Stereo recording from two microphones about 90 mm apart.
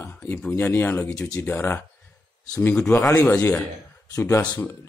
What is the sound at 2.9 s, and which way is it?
A man's voice, 30° left (ahead or behind).